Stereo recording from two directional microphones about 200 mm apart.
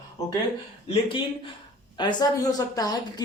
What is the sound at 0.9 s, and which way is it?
A woman's voice, 25° left (ahead or behind).